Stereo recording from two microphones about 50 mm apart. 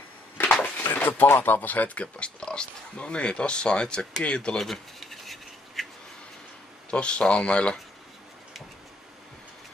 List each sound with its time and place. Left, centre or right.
0.4 s a sound: left
0.7 s speech: left
4.6 s scratch: centre
6.9 s speech: left